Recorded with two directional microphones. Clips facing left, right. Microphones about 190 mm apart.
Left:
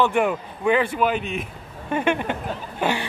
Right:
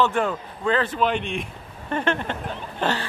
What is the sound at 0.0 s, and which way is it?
A man's voice, 15° left (ahead or behind).